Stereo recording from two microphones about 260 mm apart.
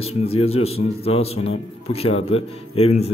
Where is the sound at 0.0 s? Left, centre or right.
Left.